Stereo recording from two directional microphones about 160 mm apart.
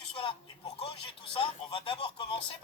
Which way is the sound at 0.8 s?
30° left (ahead or behind).